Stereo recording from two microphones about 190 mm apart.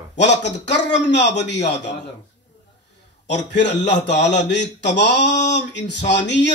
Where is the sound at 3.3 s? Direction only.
65° left (ahead or behind).